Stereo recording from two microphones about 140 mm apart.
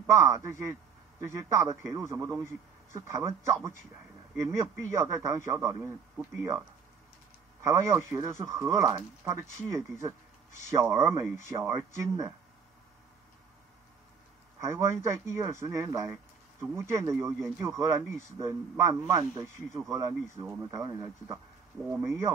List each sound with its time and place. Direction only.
0.0 s speech: 20° right (ahead or behind)
7.6 s speech: 20° right (ahead or behind)
14.6 s speech: 20° right (ahead or behind)